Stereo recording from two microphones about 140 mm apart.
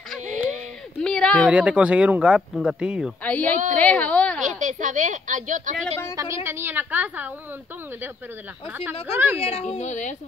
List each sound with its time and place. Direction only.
1.0 s a sound: 5° left (ahead or behind)
1.5 s speech: 10° right (ahead or behind)
3.3 s a woman's voice: 10° left (ahead or behind)
4.5 s a woman's voice: 65° right (ahead or behind)
6.1 s speech: 20° right (ahead or behind)
9.0 s speech: 15° right (ahead or behind)
9.4 s a woman's voice: 45° left (ahead or behind)
9.8 s a woman's voice: 60° left (ahead or behind)